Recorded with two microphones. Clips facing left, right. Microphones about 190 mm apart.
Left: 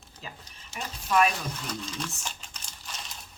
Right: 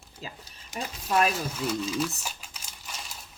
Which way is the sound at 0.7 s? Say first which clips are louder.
Left 1 dB; 35° right (ahead or behind).